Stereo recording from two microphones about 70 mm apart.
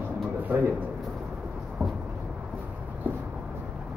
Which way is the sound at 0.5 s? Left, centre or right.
Right.